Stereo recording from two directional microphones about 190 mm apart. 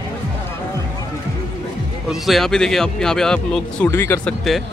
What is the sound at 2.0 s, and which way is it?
Speech, centre (ahead or behind).